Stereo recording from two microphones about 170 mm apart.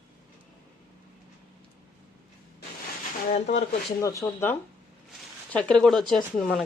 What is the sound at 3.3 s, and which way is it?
Speech, 45° left (ahead or behind).